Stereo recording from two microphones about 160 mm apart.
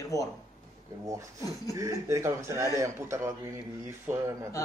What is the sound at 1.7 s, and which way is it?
A man's voice, 20° right (ahead or behind).